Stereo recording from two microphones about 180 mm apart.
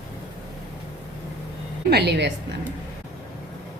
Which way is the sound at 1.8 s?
65° right (ahead or behind).